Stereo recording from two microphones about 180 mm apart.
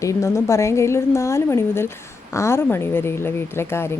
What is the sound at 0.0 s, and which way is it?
Speech, 15° left (ahead or behind).